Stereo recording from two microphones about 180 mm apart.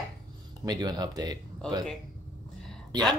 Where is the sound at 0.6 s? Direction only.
20° right (ahead or behind).